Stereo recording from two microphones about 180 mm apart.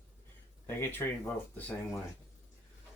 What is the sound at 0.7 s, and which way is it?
Speech, 10° left (ahead or behind).